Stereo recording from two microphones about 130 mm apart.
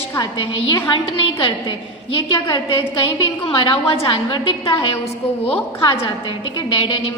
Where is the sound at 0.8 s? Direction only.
40° left (ahead or behind).